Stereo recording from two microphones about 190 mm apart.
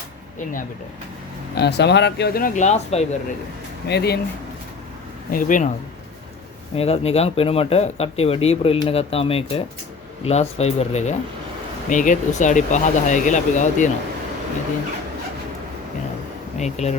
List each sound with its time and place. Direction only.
1.5 s speech: 60° left (ahead or behind); by 3.2 s 35° left (ahead or behind)
3.8 s speech: 60° left (ahead or behind)
5.3 s speech: 45° left (ahead or behind)
6.7 s speech: 30° left (ahead or behind)
16.6 s speech: 35° left (ahead or behind)